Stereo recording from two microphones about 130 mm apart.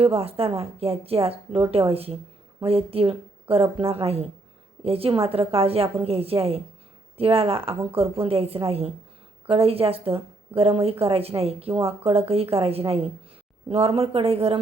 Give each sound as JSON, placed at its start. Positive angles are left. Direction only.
{"t": 0.0, "sound": "a woman's voice", "side_deg": -50}